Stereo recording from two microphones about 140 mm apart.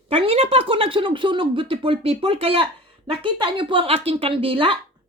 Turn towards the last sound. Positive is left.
turn(degrees=-40)  # may be behind; listen again after turning